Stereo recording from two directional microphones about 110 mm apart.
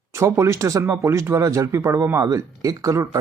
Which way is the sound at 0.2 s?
25° right (ahead or behind).